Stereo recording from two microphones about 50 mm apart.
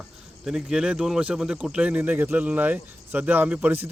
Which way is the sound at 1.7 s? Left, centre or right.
Right.